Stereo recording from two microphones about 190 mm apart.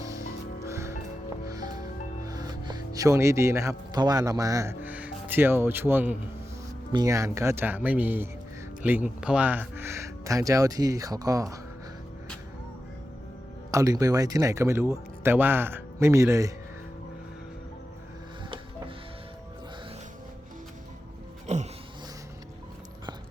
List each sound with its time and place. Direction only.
0.6 s music: 15° right (ahead or behind)
2.2 s speech: 20° right (ahead or behind)
13.7 s speech: 15° right (ahead or behind)
21.4 s a sound: 35° right (ahead or behind)